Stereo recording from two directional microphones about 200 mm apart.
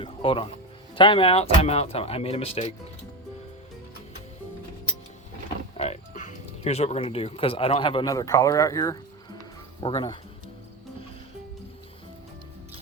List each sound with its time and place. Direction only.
0.0 s speech: 25° left (ahead or behind)
5.7 s speech: 30° left (ahead or behind)